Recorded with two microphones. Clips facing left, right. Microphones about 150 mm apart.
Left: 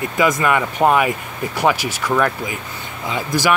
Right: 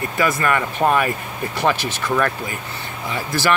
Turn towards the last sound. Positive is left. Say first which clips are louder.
# left 2 dB
turn(degrees=15)  # may be behind; listen again after turning